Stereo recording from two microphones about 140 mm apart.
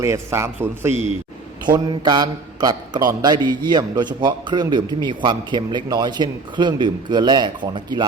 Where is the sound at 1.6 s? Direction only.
30° right (ahead or behind).